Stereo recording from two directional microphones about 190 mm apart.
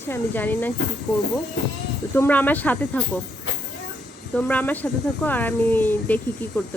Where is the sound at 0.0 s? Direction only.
10° left (ahead or behind).